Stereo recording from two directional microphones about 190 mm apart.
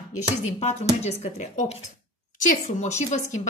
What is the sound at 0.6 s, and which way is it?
A woman's voice, 35° left (ahead or behind).